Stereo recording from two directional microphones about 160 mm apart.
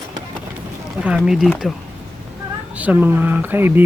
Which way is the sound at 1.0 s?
5° right (ahead or behind).